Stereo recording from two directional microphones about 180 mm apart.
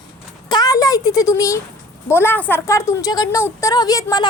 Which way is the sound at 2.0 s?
15° left (ahead or behind).